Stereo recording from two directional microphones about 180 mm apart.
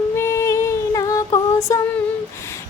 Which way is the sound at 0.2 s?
15° left (ahead or behind).